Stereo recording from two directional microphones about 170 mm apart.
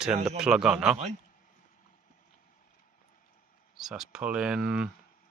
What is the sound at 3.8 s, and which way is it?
Speech, centre (ahead or behind).